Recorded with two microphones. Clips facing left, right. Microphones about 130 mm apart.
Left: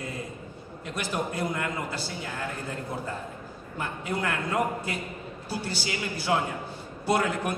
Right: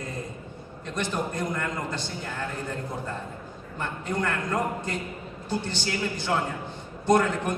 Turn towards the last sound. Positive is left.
turn(degrees=10)  # may be behind; listen again after turning